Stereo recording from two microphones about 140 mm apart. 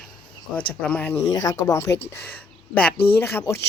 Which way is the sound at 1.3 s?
25° left (ahead or behind).